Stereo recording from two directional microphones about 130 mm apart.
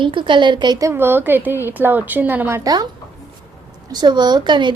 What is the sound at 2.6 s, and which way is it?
Speech, 30° right (ahead or behind).